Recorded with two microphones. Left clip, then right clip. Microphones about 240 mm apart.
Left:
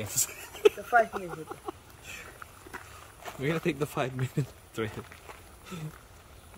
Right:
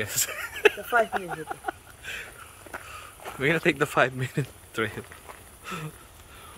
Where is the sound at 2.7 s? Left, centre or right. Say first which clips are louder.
Right 9 dB; right.